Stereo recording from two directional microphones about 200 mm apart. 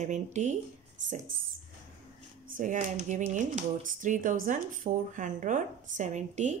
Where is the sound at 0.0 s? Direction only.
35° right (ahead or behind).